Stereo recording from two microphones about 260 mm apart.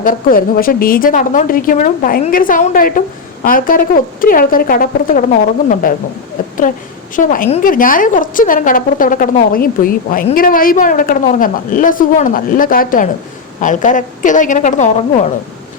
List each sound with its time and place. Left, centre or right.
0.0 s speech: left
7.2 s a woman's voice: left